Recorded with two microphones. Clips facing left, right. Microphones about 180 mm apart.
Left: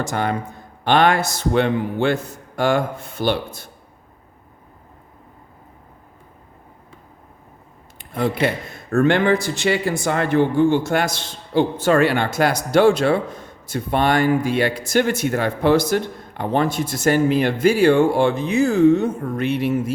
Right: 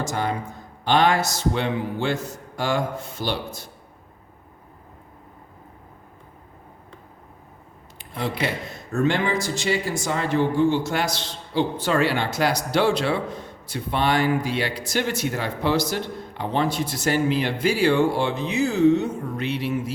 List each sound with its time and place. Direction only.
0.0 s a man's voice: 60° left (ahead or behind)
7.9 s speech: 50° left (ahead or behind)